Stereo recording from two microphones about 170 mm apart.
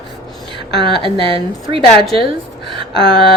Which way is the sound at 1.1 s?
30° right (ahead or behind).